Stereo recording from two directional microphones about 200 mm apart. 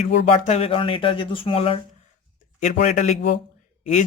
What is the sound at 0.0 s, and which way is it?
Speech, 35° left (ahead or behind).